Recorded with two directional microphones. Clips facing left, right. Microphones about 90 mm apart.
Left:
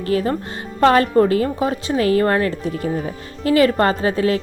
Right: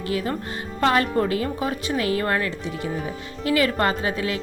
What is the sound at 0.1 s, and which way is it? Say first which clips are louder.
A woman's voice: left 7 dB; 40° left (ahead or behind).